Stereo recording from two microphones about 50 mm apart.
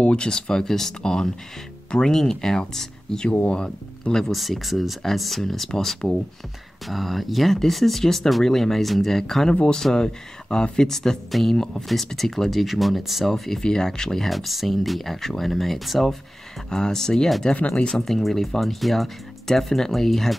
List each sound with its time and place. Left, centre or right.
0.0 s speech: centre
4.3 s speech: centre
6.9 s speech: centre
9.5 s speech: centre
16.7 s speech: centre
17.6 s speech: left
17.8 s speech: centre